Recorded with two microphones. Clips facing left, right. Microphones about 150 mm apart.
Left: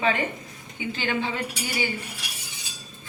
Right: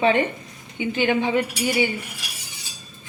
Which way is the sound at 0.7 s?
20° right (ahead or behind).